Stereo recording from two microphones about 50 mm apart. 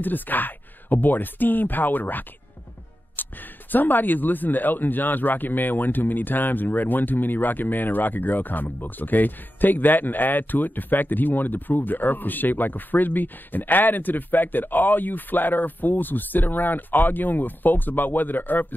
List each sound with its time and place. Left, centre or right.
0.0 s speech: left